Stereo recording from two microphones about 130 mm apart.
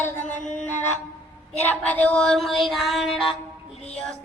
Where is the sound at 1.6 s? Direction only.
10° left (ahead or behind).